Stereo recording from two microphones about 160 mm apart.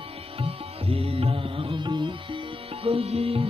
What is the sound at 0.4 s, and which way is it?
Music, 35° right (ahead or behind).